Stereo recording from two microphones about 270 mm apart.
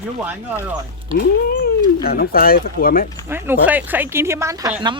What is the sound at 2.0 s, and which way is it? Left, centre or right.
Speech, left.